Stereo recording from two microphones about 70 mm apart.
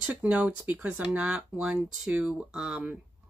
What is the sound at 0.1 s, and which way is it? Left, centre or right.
Speech, centre.